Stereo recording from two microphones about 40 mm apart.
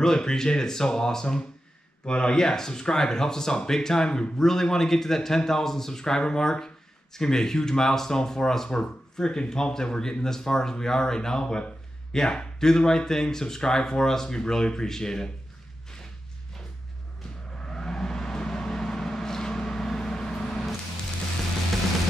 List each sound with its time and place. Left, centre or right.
0.0 s speech: centre
17.6 s vehicle: centre